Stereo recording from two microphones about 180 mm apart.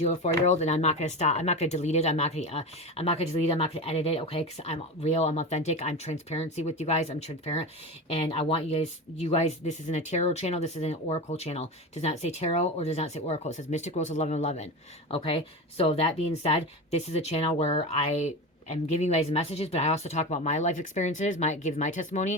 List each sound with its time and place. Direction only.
0.0 s speech: 40° left (ahead or behind)